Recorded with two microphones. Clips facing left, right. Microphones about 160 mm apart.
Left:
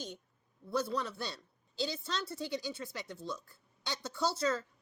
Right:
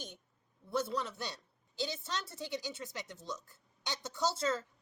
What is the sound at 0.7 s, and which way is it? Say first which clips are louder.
A woman's voice: left 1 dB; 25° right (ahead or behind).